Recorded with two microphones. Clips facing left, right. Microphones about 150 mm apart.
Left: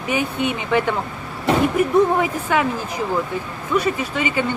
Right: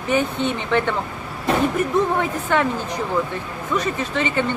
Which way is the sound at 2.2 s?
10° left (ahead or behind).